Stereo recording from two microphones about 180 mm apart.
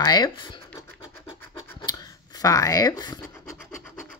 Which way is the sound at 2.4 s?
20° left (ahead or behind).